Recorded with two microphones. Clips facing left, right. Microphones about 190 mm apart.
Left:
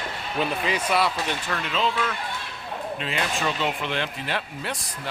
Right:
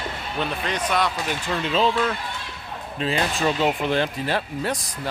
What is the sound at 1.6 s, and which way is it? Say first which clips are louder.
Speech: right 6 dB; 35° right (ahead or behind).